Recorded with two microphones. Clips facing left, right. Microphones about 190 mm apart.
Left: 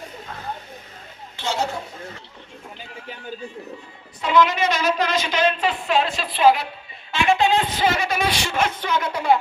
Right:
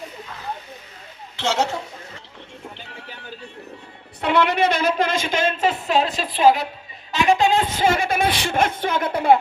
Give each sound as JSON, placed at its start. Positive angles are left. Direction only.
{"t": 1.4, "sound": "a woman's voice", "side_deg": -90}
{"t": 4.2, "sound": "a woman's voice", "side_deg": -60}